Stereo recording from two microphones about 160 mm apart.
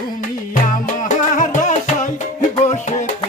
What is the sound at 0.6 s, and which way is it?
Music, 55° left (ahead or behind).